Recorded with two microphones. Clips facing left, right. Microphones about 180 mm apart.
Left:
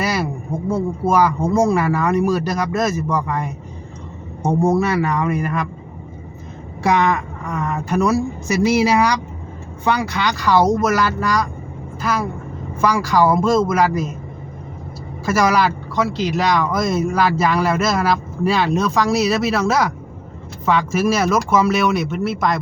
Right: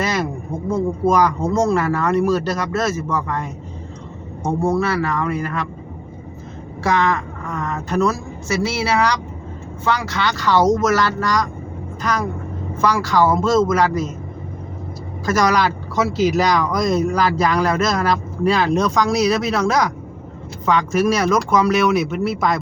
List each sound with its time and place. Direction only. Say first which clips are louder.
0.0 s a sound: even; 10° left (ahead or behind)
0.7 s speech: right 1 dB; 5° left (ahead or behind)
6.8 s speech: left 2 dB; 15° left (ahead or behind)
15.3 s speech: left 1 dB; 5° left (ahead or behind)